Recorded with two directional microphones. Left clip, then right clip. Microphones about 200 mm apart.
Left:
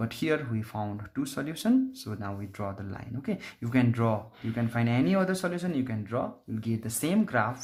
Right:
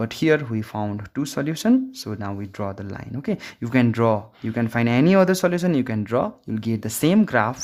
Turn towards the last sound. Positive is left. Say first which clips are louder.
# right 8 dB
turn(degrees=-45)  # may be behind; listen again after turning